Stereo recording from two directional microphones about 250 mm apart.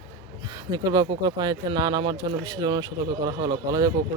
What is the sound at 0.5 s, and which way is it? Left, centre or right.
Speech, centre.